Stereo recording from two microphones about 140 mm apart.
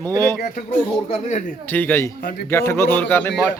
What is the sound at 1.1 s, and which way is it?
Speech, 55° left (ahead or behind).